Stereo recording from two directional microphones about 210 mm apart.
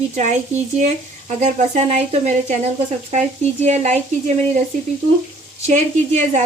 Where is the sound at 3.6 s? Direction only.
35° right (ahead or behind).